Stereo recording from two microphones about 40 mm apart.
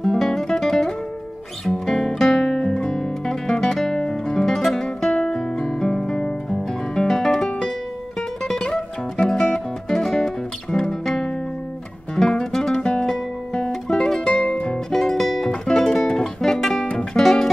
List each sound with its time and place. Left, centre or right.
0.0 s music: centre
2.0 s guitar: centre
4.8 s guitar: left
9.2 s music: left
14.2 s music: left
14.9 s music: centre